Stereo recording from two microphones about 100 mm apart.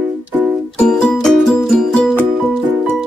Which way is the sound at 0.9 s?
5° left (ahead or behind).